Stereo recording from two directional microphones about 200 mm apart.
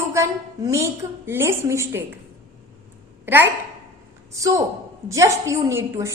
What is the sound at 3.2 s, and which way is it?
A woman's voice, 10° right (ahead or behind).